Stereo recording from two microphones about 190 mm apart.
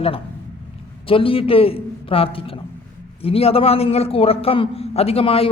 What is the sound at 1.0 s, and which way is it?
A man's voice, 30° left (ahead or behind).